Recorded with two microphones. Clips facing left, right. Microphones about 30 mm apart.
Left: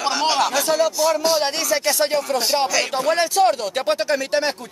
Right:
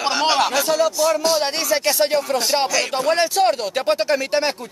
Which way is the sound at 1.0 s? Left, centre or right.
Centre.